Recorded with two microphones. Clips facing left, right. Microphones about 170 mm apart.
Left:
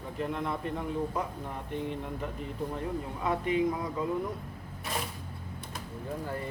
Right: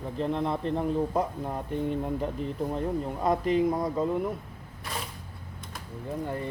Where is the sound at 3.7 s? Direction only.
35° right (ahead or behind).